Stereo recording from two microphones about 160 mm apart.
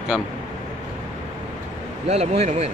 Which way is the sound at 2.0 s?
40° right (ahead or behind).